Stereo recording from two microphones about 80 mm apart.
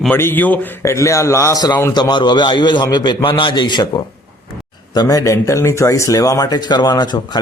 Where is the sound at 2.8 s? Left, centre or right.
Left.